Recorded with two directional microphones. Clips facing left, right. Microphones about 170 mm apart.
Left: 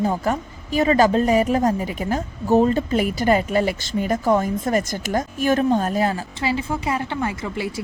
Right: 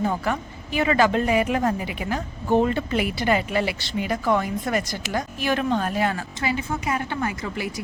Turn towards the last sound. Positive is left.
turn(degrees=25)  # may be behind; listen again after turning